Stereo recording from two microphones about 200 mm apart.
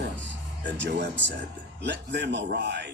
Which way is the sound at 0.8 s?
60° right (ahead or behind).